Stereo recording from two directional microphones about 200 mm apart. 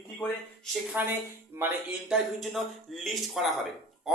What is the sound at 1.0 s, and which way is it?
Speech, 10° right (ahead or behind).